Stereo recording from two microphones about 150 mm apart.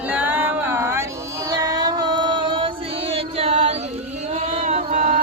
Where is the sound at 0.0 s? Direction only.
10° right (ahead or behind).